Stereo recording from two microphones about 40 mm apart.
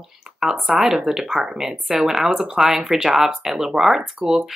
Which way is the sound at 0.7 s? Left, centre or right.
Centre.